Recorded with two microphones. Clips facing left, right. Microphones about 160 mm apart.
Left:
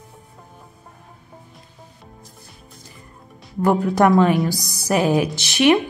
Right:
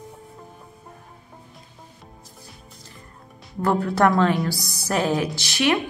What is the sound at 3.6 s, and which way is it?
Speech, 15° left (ahead or behind).